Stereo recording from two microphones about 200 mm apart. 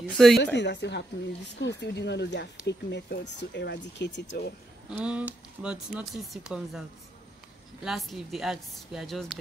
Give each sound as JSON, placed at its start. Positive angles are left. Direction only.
{"t": 0.0, "sound": "speech", "side_deg": 0}
{"t": 0.6, "sound": "speech", "side_deg": 60}
{"t": 4.8, "sound": "speech", "side_deg": -5}
{"t": 7.8, "sound": "speech", "side_deg": 0}